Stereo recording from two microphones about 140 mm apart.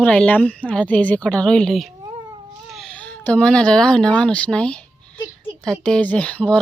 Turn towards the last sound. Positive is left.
turn(degrees=10)  # may be behind; listen again after turning